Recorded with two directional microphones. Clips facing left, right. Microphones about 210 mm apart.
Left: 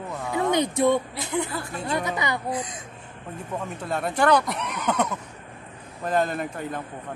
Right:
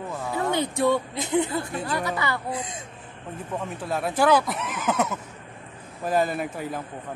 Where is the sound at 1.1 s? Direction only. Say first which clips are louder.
Right 4 dB; 20° right (ahead or behind).